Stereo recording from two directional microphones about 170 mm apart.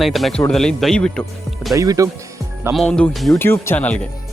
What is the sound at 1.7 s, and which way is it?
Speech, 20° right (ahead or behind).